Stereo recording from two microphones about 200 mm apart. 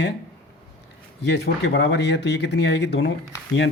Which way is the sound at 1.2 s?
60° left (ahead or behind).